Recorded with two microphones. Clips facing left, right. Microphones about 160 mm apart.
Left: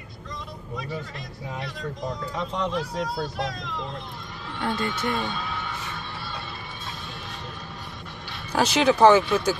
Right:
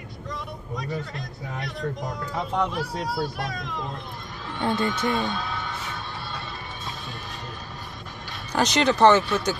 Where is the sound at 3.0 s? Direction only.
55° right (ahead or behind).